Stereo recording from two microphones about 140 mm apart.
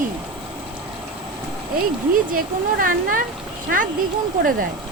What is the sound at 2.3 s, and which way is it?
Speech, 85° right.